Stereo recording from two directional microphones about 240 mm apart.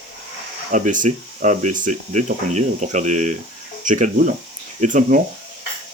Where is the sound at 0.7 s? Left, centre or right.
Right.